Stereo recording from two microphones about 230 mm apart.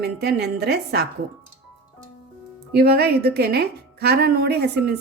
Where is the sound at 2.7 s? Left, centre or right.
Right.